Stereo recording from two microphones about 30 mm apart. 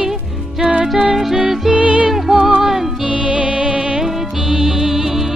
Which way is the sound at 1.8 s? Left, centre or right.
Right.